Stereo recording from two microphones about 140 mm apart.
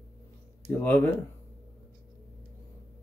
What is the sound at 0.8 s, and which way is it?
Speech, 15° left (ahead or behind).